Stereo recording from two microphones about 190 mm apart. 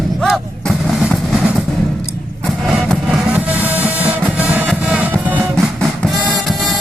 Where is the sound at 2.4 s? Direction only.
Centre (ahead or behind).